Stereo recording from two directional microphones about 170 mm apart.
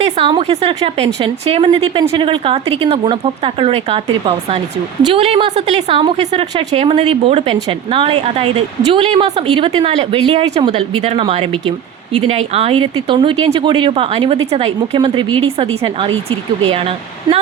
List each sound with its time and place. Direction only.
0.0 s a woman's voice: 30° right (ahead or behind)